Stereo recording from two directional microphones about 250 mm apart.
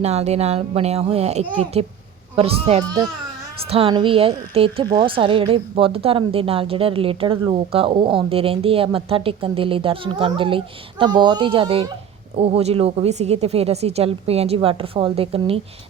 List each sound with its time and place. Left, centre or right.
0.0 s speech: right